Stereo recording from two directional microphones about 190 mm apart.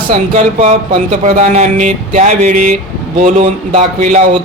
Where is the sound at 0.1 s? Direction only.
35° right (ahead or behind).